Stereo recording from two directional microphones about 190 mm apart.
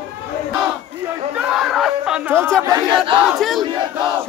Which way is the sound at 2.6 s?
20° right (ahead or behind).